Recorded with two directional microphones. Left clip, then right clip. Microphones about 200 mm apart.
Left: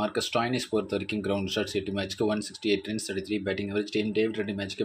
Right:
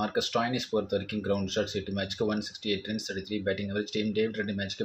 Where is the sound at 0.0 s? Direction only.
35° left (ahead or behind).